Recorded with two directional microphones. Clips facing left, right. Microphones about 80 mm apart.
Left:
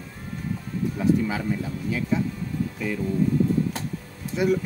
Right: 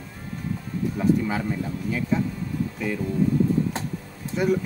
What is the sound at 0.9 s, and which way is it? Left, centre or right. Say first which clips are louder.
Speech: even; centre.